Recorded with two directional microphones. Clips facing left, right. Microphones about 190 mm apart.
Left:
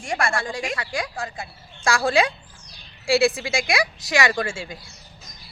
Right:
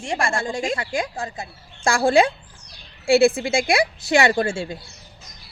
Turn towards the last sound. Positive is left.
turn(degrees=-30)  # may be behind; listen again after turning